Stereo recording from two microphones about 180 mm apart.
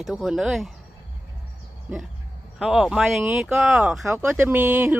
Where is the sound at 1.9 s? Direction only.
10° right (ahead or behind).